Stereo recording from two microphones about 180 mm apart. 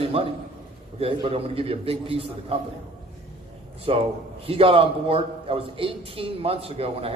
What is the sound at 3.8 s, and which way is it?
A man's voice, 30° right (ahead or behind).